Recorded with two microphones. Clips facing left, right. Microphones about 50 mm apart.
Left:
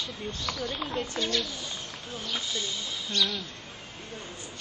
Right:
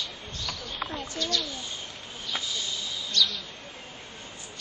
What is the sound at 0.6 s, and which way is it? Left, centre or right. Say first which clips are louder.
Speech: left 3 dB; left.